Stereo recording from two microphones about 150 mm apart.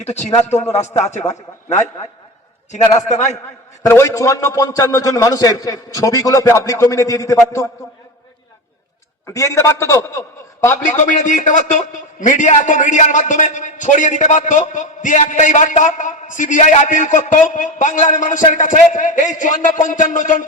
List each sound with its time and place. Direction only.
0.0 s a man's voice: 50° left (ahead or behind)
3.8 s a man's voice: 20° left (ahead or behind)
9.2 s a man's voice: 20° left (ahead or behind)
10.8 s a man's voice: 55° left (ahead or behind)